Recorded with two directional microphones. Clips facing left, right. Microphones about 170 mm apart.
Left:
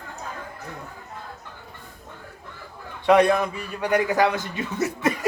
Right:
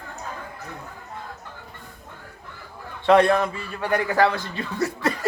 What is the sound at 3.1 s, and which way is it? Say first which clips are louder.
A man's voice: right 1 dB; 15° left (ahead or behind).